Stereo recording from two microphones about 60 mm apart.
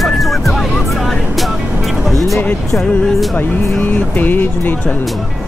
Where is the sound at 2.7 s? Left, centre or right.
Centre.